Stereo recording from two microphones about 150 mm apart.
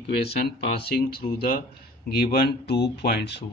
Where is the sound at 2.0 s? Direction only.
90° left.